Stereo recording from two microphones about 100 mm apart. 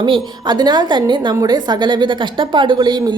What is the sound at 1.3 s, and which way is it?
A woman's voice, 40° right (ahead or behind).